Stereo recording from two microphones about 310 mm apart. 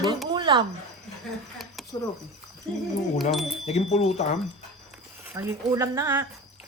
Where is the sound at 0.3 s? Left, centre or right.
Centre.